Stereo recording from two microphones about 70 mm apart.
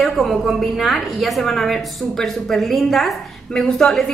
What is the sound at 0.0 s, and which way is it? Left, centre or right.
Speech, centre.